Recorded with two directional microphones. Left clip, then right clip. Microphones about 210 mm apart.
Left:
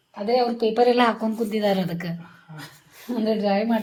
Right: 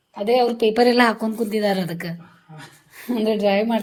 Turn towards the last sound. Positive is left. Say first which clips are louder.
# right 3 dB
turn(degrees=-35)  # may be behind; listen again after turning